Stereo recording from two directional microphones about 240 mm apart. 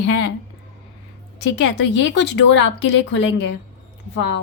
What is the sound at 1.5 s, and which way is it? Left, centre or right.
Speech, left.